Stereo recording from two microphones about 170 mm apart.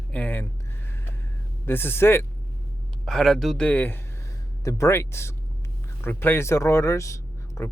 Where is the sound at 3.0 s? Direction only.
Centre (ahead or behind); by 7.6 s 15° left (ahead or behind).